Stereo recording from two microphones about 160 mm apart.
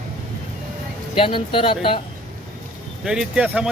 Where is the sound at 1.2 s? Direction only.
35° left (ahead or behind).